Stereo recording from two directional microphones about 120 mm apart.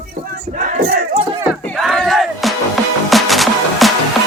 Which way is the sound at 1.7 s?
Centre (ahead or behind).